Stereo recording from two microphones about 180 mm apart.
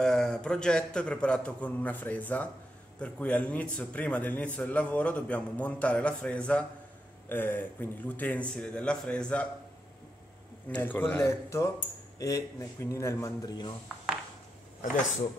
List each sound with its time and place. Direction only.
0.0 s a man's voice: 5° left (ahead or behind)
10.7 s a man's voice: 10° left (ahead or behind)